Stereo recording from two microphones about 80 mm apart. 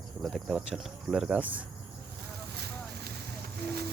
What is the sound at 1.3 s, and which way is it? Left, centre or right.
Speech, centre.